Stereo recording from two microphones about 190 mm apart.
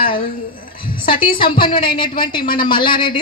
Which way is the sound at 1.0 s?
25° left (ahead or behind).